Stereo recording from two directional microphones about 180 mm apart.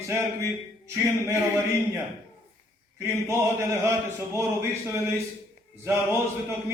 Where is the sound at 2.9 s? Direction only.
15° right (ahead or behind).